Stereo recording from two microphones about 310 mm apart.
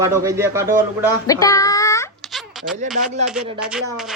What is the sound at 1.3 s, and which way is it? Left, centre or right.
Speech, centre.